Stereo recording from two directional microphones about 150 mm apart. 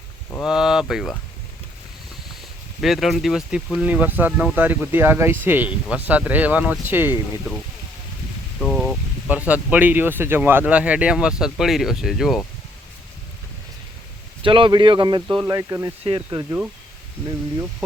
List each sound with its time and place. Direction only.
0.4 s speech: 5° right (ahead or behind)
2.8 s speech: centre (ahead or behind)
8.6 s a sound: centre (ahead or behind)
9.3 s speech: 10° right (ahead or behind)
14.4 s speech: 35° right (ahead or behind)